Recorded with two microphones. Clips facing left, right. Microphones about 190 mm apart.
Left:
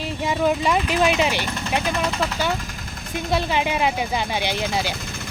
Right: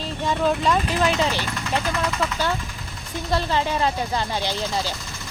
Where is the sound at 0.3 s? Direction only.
10° left (ahead or behind).